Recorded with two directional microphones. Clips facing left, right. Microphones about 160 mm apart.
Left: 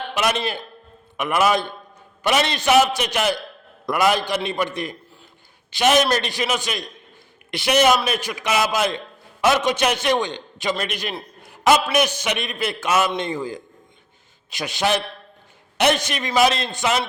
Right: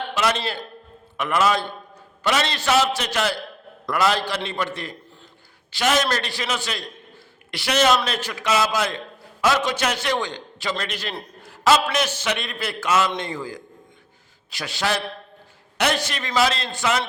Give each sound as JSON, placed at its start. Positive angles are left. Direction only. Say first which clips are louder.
{"t": 0.1, "sound": "a man's voice", "louder": "left 2 dB", "side_deg": 15}
{"t": 11.4, "sound": "a sound", "louder": "left 1 dB", "side_deg": 15}
{"t": 11.9, "sound": "a man's voice", "louder": "left 3 dB", "side_deg": 15}